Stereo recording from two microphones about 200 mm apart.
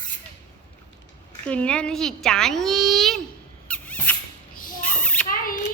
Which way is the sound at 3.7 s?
10° left (ahead or behind).